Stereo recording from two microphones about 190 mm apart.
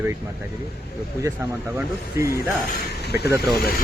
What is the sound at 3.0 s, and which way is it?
Vehicle, 60° left (ahead or behind).